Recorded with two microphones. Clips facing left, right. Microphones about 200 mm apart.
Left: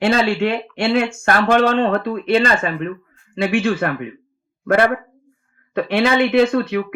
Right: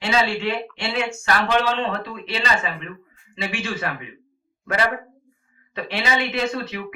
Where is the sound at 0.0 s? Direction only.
55° left (ahead or behind).